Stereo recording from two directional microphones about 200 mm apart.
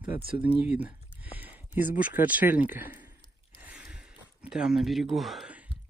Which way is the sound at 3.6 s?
5° right (ahead or behind).